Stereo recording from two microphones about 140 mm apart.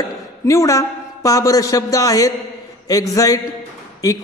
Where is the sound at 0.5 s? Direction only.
20° left (ahead or behind).